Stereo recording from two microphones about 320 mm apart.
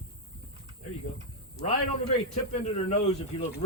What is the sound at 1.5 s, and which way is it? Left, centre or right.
A man's voice, centre.